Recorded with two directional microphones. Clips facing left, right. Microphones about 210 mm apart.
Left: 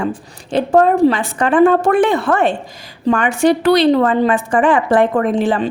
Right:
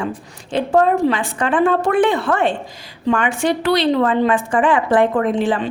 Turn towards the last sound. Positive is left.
turn(degrees=40)  # may be behind; listen again after turning